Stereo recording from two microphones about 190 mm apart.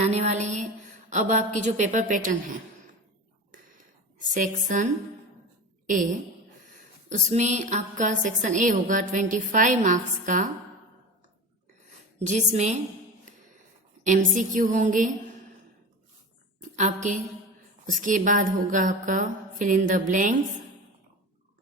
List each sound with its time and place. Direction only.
0.0 s a woman's voice: 35° right (ahead or behind)
4.2 s a woman's voice: 40° right (ahead or behind)
7.1 s a woman's voice: 40° right (ahead or behind)
12.3 s a woman's voice: 40° right (ahead or behind)
14.0 s a woman's voice: 40° right (ahead or behind)
16.7 s a woman's voice: 40° right (ahead or behind)